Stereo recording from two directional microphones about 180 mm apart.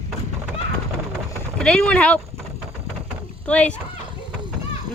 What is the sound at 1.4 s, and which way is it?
Speech, 5° left (ahead or behind).